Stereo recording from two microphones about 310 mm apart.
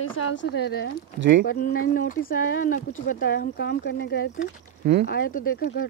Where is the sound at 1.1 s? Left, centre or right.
Right.